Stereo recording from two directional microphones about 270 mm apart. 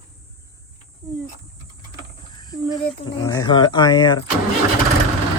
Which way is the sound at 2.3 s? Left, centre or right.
Centre.